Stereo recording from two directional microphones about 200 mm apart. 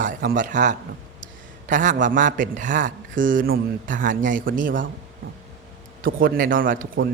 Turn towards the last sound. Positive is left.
turn(degrees=-45)  # may be behind; listen again after turning